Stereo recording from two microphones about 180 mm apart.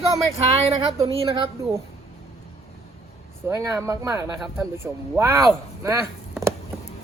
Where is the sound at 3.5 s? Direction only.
15° right (ahead or behind).